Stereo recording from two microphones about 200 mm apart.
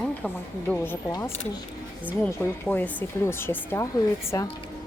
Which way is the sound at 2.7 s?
10° left (ahead or behind).